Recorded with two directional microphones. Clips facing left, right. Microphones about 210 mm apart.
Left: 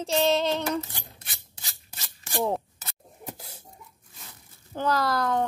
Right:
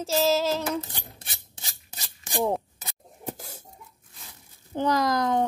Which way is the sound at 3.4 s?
45° right (ahead or behind).